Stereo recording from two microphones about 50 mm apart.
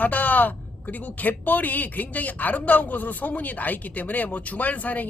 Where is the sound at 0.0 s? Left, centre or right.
Left.